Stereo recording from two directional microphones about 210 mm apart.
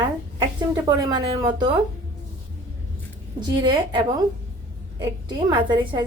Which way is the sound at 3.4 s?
20° right (ahead or behind).